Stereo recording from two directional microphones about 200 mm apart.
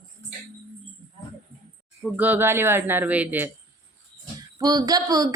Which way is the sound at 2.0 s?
10° right (ahead or behind).